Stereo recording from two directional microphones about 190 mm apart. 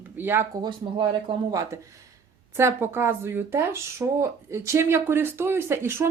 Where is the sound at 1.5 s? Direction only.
15° right (ahead or behind).